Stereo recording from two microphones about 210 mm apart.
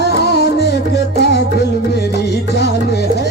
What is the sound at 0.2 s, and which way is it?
Music, 50° left (ahead or behind).